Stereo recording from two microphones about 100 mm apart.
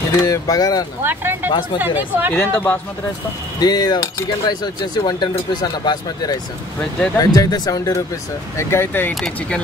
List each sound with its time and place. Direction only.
0.2 s speech: 40° left (ahead or behind)
1.0 s speech: 20° right (ahead or behind)
2.3 s speech: 15° left (ahead or behind)
3.5 s speech: 45° left (ahead or behind)
8.5 s speech: 25° left (ahead or behind)
9.1 s speech: 5° left (ahead or behind)